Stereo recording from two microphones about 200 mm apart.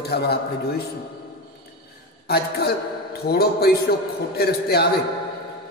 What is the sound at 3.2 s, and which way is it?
Speech, 50° left (ahead or behind).